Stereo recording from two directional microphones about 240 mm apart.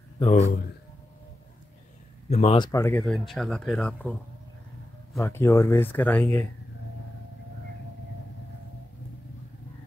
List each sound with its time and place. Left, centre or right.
0.2 s speech: left
2.2 s speech: left; by 4.2 s centre
5.2 s speech: centre